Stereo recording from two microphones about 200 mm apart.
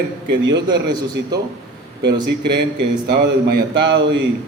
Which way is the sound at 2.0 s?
55° right (ahead or behind).